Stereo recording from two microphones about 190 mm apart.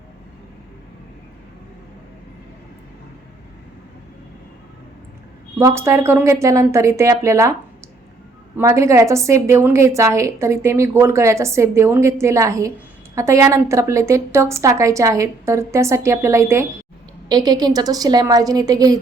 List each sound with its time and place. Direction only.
5.5 s a woman's voice: 15° right (ahead or behind)
8.5 s a woman's voice: 15° right (ahead or behind)